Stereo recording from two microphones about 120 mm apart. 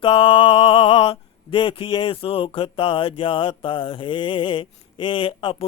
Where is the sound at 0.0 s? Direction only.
45° left (ahead or behind).